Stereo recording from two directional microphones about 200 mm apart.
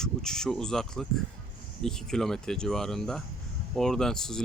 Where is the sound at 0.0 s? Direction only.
5° left (ahead or behind).